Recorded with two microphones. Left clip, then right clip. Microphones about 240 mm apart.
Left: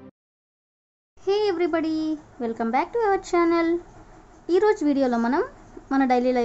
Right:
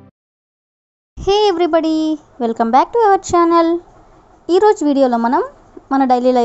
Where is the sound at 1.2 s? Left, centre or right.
Right.